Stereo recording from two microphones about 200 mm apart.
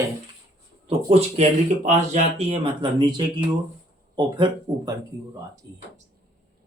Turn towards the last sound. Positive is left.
turn(degrees=-20)  # may be behind; listen again after turning